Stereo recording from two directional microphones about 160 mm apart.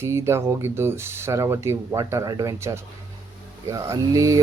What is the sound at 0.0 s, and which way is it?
Speech, 15° right (ahead or behind).